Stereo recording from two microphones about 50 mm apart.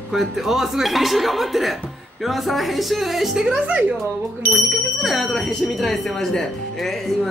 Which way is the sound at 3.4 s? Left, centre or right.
Right.